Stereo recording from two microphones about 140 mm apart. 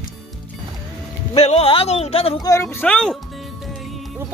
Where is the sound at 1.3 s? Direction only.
45° left (ahead or behind).